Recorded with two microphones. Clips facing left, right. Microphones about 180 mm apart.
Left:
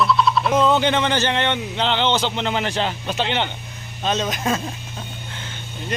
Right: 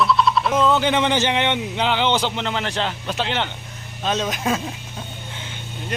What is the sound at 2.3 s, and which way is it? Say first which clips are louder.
Speech: left 2 dB; 5° left (ahead or behind).